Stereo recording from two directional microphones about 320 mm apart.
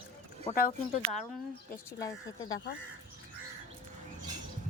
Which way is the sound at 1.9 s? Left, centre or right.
Centre.